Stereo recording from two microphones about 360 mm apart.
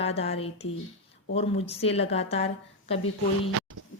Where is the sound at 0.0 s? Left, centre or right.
Centre.